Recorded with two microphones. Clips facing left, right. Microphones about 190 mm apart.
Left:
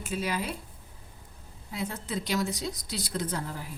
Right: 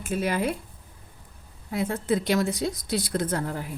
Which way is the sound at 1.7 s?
55° right (ahead or behind).